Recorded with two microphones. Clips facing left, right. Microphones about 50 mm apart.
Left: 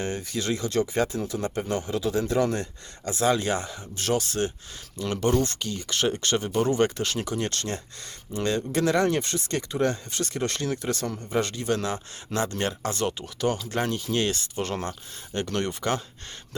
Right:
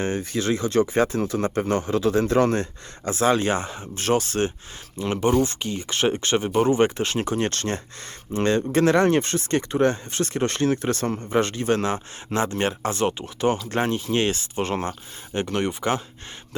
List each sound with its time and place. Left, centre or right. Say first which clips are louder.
0.0 s speech: right 5 dB; right
3.1 s speech: right 3 dB; right; by 16.0 s centre